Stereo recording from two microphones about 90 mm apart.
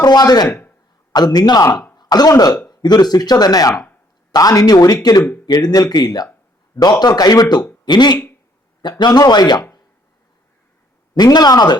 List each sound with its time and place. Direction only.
0.0 s speech: 45° left (ahead or behind)
0.4 s speech: 25° left (ahead or behind)
1.1 s speech: 50° left (ahead or behind)
11.1 s speech: 50° left (ahead or behind)